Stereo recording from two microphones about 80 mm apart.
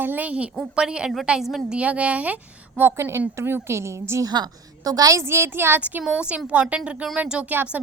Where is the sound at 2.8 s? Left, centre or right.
Right.